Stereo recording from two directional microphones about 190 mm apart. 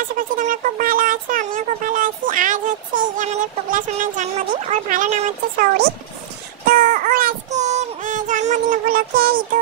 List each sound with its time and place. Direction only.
0.2 s speech: 45° right (ahead or behind)
6.6 s child singing: 50° right (ahead or behind)